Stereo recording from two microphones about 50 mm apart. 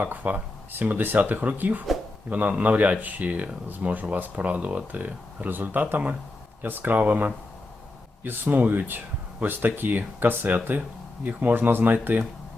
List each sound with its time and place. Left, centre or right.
0.0 s speech: right